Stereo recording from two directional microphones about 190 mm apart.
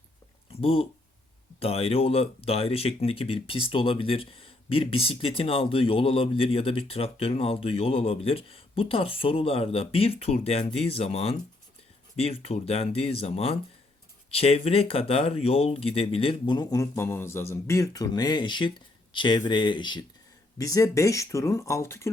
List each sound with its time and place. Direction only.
0.6 s speech: 30° left (ahead or behind); by 22.1 s 15° left (ahead or behind)